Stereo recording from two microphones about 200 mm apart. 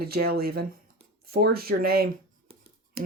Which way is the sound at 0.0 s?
50° right (ahead or behind).